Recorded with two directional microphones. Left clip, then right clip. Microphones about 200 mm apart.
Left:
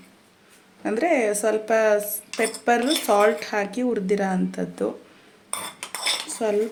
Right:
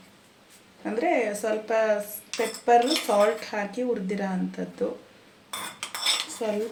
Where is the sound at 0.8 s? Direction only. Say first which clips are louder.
Left 4 dB; 60° left (ahead or behind).